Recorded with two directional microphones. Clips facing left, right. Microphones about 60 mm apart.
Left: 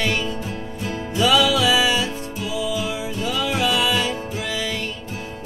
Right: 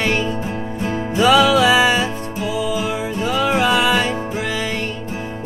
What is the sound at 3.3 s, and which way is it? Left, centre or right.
Music, right.